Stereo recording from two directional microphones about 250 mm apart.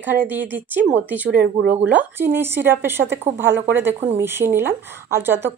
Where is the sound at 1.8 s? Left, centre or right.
Centre.